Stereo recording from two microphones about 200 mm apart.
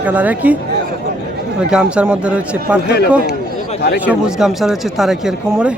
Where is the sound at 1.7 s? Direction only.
5° right (ahead or behind).